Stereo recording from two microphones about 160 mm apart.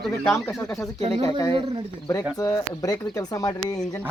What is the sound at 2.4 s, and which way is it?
Speech, 20° left (ahead or behind).